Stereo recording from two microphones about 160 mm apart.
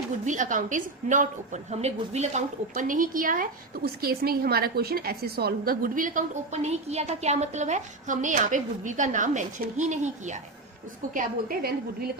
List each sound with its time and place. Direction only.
0.3 s a woman's voice: 55° right (ahead or behind)
11.1 s a woman's voice: 60° right (ahead or behind)